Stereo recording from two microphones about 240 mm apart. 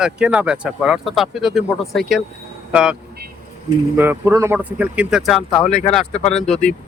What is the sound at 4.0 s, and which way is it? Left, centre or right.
Speech, centre.